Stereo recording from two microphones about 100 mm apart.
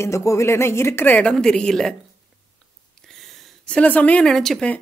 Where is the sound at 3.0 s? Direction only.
5° left (ahead or behind).